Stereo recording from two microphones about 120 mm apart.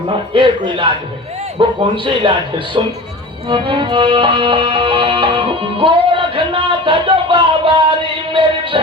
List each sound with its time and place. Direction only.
0.1 s music: 45° right (ahead or behind)
2.8 s music: 45° right (ahead or behind)